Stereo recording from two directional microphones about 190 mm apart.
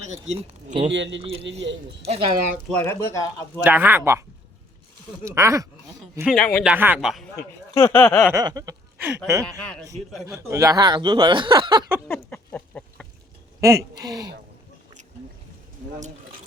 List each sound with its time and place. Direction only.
0.3 s speech: 35° right (ahead or behind)
0.9 s speech: 70° right (ahead or behind)
2.0 s speech: 30° right (ahead or behind)
2.6 s speech: 10° left (ahead or behind)
3.6 s speech: 10° right (ahead or behind)
5.2 s speech: 15° right (ahead or behind)
6.3 s a man's voice: 5° left (ahead or behind)
6.7 s a man's voice: 10° right (ahead or behind)
7.3 s speech: 15° left (ahead or behind)
8.3 s speech: 20° right (ahead or behind)
12.0 s a sound: 10° left (ahead or behind)
13.6 s speech: 15° right (ahead or behind)